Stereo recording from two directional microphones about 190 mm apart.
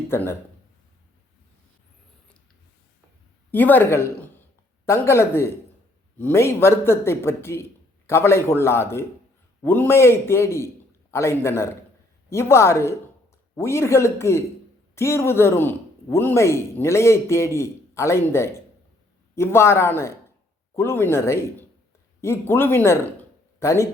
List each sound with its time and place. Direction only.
0.1 s speech: 10° left (ahead or behind)
3.5 s speech: 10° left (ahead or behind)